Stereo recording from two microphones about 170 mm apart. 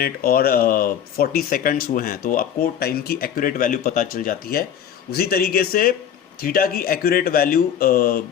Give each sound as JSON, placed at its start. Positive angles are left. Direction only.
{"t": 0.0, "sound": "speech", "side_deg": 60}